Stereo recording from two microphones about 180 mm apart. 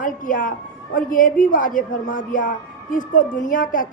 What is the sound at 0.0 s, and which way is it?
A woman's voice, 45° left (ahead or behind).